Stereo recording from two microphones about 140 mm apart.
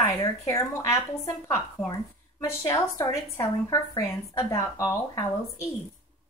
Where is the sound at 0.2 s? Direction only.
25° left (ahead or behind).